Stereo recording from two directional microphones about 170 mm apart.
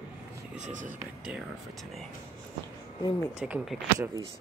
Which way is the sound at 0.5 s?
45° right (ahead or behind).